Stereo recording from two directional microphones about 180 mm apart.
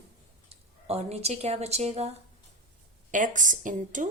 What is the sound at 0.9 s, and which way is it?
A woman's voice, 35° right (ahead or behind).